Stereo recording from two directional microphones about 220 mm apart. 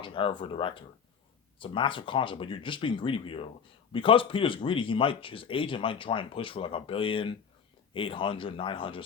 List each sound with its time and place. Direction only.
0.0 s speech: 25° left (ahead or behind)